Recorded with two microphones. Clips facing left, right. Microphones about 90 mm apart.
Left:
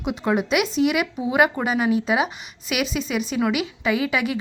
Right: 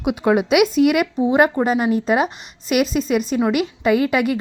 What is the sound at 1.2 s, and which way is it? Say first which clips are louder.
A woman's voice: right 4 dB; 35° right (ahead or behind).